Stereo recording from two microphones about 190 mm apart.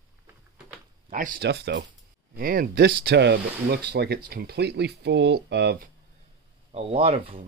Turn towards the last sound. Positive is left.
turn(degrees=-30)  # may be behind; listen again after turning